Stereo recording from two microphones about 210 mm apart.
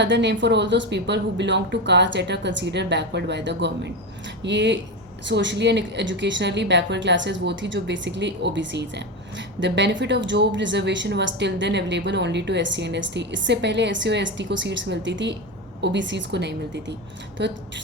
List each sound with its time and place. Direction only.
0.0 s a woman's voice: 55° right (ahead or behind)